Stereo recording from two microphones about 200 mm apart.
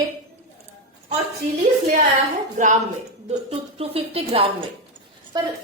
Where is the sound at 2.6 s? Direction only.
35° right (ahead or behind).